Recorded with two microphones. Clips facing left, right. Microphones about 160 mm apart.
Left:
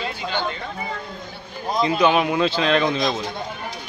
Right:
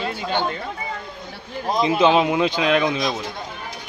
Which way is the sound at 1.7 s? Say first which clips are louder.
Right 1 dB; 20° right (ahead or behind).